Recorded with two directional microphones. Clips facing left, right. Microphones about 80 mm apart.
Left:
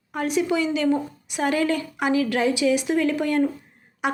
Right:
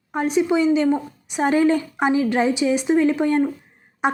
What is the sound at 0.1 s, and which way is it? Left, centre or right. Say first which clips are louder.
A woman's voice: right 4 dB; right.